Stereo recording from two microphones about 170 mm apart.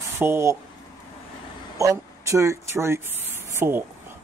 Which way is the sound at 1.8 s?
20° right (ahead or behind).